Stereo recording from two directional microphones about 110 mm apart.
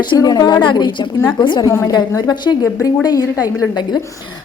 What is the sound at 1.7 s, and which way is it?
A woman's voice, 25° left (ahead or behind).